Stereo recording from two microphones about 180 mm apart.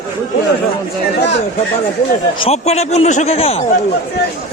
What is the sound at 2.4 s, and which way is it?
Speech, 35° left (ahead or behind).